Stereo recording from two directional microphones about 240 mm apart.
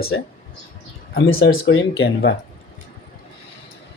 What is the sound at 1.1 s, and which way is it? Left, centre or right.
Speech, left.